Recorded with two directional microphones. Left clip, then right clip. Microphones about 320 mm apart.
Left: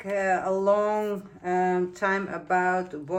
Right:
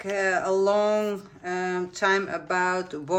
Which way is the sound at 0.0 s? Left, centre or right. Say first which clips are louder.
Right 1 dB; centre.